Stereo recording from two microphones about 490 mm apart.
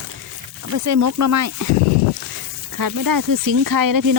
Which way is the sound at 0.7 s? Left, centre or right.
Right.